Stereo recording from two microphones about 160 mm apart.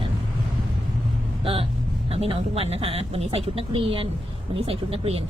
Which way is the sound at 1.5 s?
35° right (ahead or behind).